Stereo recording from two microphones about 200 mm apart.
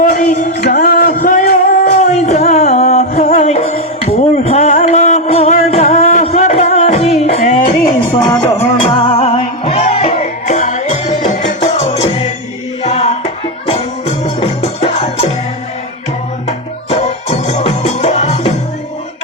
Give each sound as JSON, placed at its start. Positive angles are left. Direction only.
{"t": 0.0, "sound": "music", "side_deg": 40}
{"t": 0.8, "sound": "a sound", "side_deg": 50}
{"t": 8.4, "sound": "music", "side_deg": 30}
{"t": 16.5, "sound": "music", "side_deg": 30}